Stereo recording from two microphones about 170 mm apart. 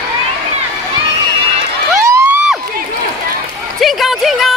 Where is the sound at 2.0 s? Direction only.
15° right (ahead or behind).